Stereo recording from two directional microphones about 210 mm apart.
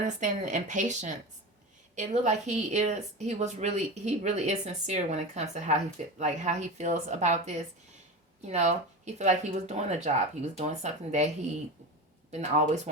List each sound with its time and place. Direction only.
0.2 s a woman's voice: 35° right (ahead or behind)
12.3 s a woman's voice: 35° right (ahead or behind)